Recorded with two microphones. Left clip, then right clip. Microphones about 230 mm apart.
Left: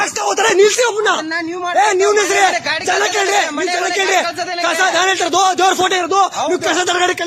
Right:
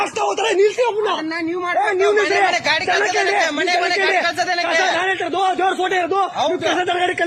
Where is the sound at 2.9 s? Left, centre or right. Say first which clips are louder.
Left 5 dB; left.